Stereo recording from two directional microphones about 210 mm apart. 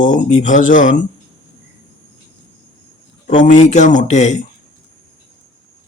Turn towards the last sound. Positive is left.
turn(degrees=35)  # may be behind; listen again after turning